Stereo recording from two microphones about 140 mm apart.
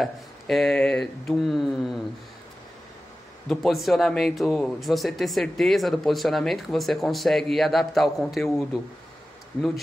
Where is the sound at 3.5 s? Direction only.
Centre (ahead or behind).